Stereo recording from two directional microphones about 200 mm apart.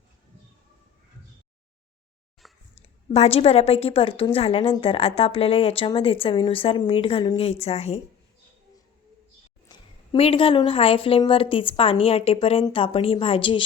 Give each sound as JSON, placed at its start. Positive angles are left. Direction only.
{"t": 2.4, "sound": "a sound", "side_deg": 0}
{"t": 3.1, "sound": "speech", "side_deg": 30}
{"t": 9.6, "sound": "speech", "side_deg": 25}